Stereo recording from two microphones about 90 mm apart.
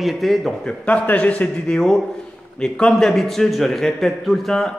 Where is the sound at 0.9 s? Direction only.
15° left (ahead or behind).